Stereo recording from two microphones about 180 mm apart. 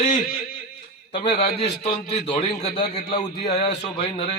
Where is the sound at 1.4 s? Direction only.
35° left (ahead or behind).